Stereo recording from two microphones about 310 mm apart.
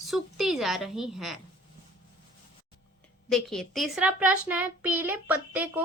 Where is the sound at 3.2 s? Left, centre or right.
Centre.